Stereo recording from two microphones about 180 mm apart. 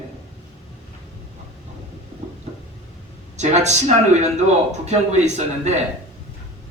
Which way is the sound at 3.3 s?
40° right (ahead or behind).